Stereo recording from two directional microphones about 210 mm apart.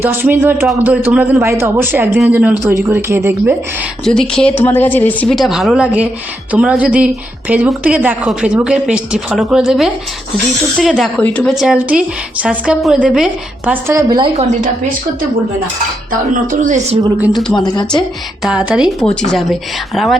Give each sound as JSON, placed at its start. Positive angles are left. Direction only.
{"t": 0.0, "sound": "a man's voice", "side_deg": -10}
{"t": 4.0, "sound": "a woman's voice", "side_deg": 5}
{"t": 16.5, "sound": "a woman's voice", "side_deg": -35}
{"t": 17.0, "sound": "a man's voice", "side_deg": -5}
{"t": 17.6, "sound": "a woman's voice", "side_deg": 20}
{"t": 18.4, "sound": "a woman's voice", "side_deg": -5}